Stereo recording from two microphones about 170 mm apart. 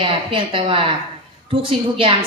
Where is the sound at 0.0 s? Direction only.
30° right (ahead or behind).